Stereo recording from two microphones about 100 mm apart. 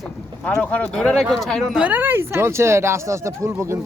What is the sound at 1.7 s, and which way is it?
Speech, 15° right (ahead or behind).